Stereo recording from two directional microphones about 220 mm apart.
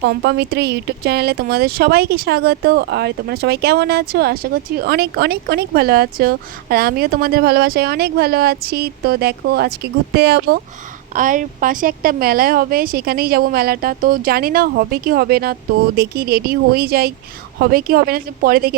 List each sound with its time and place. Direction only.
0.1 s speech: 50° right (ahead or behind)
11.1 s speech: 35° right (ahead or behind)